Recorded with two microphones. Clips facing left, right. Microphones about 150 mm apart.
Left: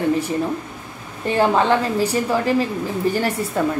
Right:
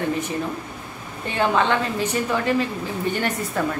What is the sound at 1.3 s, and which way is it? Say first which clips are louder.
A woman's voice: left 3 dB; 35° left (ahead or behind).